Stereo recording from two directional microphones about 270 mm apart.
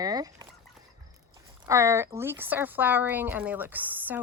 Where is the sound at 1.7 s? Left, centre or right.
Centre.